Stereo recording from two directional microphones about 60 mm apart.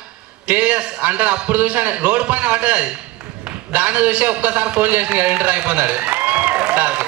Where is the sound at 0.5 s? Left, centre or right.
Right.